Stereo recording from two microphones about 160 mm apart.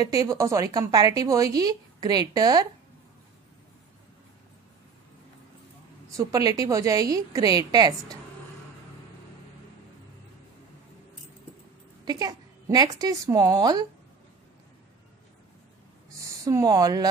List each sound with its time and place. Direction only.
0.0 s a woman's voice: 25° right (ahead or behind)
6.0 s a woman's voice: 20° right (ahead or behind)
12.0 s a woman's voice: 25° right (ahead or behind)
16.2 s speech: 20° right (ahead or behind)